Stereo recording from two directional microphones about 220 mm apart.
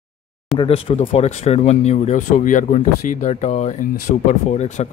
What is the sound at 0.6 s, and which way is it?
Speech, 25° left (ahead or behind).